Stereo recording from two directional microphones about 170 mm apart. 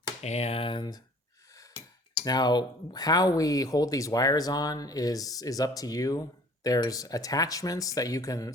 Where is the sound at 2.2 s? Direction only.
25° left (ahead or behind).